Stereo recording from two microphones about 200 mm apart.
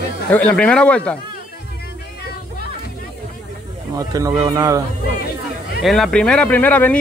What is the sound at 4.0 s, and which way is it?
Speech, 15° right (ahead or behind).